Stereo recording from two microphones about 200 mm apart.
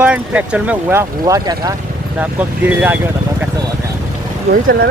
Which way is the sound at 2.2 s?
5° right (ahead or behind).